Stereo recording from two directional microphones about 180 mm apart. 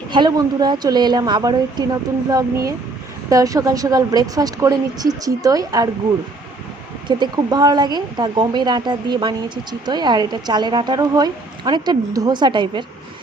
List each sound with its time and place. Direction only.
0.1 s speech: 25° right (ahead or behind)
7.1 s speech: 25° right (ahead or behind)